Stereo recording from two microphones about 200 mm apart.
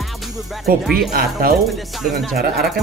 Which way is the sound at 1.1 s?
50° right (ahead or behind).